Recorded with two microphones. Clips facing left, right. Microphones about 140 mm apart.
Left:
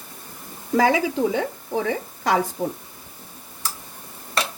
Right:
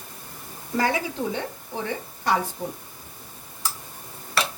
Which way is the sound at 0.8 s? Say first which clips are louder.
Left 5 dB; 90° left.